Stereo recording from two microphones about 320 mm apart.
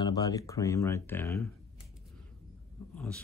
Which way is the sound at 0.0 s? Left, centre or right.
Centre.